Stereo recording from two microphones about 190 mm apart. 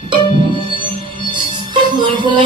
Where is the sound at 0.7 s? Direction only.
25° right (ahead or behind).